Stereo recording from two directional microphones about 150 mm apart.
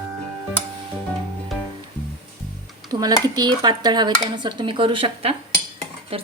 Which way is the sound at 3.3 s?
25° right (ahead or behind).